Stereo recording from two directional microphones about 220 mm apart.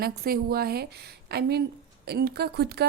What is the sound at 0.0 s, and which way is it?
A woman's voice, 45° right (ahead or behind).